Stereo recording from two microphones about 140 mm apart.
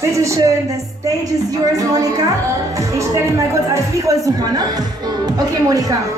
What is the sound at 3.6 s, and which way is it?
Speech, 20° right (ahead or behind).